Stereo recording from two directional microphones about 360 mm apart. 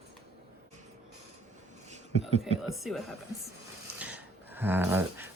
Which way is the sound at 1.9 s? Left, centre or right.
Centre.